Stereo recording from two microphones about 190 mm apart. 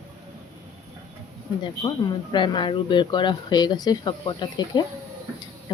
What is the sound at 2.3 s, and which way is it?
Speech, 25° left (ahead or behind).